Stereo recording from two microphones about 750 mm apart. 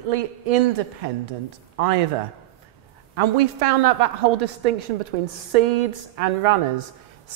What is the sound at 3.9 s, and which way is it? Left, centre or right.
A woman's voice, right.